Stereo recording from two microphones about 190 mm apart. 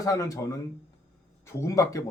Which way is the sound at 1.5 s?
15° left (ahead or behind).